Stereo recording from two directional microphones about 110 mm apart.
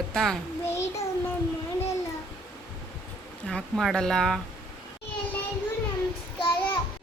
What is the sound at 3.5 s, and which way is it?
Speech, 5° left (ahead or behind).